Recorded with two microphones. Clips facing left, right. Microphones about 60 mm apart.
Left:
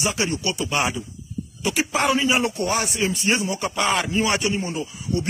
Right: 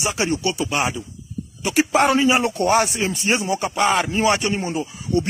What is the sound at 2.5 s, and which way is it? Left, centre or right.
Speech, right.